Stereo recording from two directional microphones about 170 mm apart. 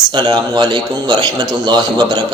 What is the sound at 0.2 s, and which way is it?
Speech, 25° right (ahead or behind).